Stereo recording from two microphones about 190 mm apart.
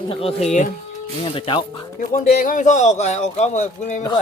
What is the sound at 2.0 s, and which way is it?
A man's voice, 45° left (ahead or behind).